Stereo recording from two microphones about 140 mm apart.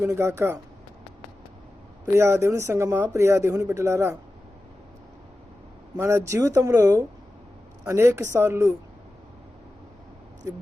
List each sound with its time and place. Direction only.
0.0 s speech: 20° right (ahead or behind)
2.1 s speech: 20° right (ahead or behind)
6.0 s speech: 20° right (ahead or behind)
10.4 s speech: 20° right (ahead or behind)